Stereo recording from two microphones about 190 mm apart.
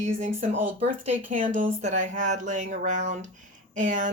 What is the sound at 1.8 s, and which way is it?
Speech, 40° right (ahead or behind).